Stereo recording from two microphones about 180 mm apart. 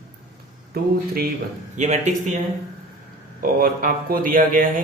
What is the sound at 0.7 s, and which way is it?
Speech, 60° right (ahead or behind).